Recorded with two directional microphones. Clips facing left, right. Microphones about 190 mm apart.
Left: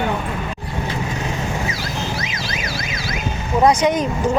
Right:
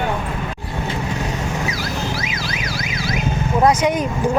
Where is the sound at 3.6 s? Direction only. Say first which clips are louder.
Left 1 dB; 10° right (ahead or behind).